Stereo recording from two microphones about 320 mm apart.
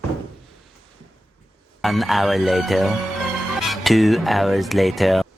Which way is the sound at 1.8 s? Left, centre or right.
Centre.